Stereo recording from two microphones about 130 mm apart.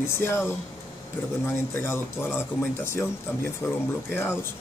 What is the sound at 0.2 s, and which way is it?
Speech, 20° left (ahead or behind).